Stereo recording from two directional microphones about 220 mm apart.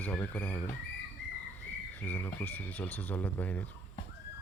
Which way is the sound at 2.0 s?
10° left (ahead or behind).